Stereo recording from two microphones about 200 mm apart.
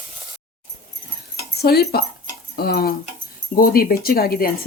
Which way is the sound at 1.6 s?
50° left (ahead or behind).